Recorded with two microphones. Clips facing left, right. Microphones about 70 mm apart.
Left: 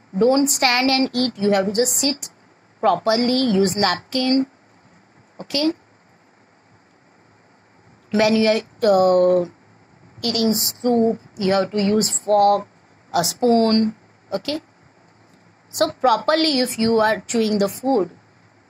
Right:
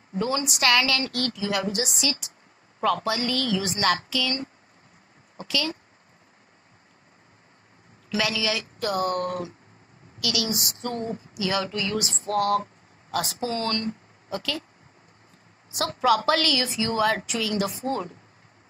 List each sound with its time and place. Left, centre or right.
0.1 s a woman's voice: left
8.1 s a woman's voice: left
13.1 s a woman's voice: left
13.5 s speech: left
15.7 s a woman's voice: left